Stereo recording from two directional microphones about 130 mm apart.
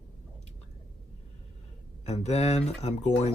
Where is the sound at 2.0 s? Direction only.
55° left (ahead or behind).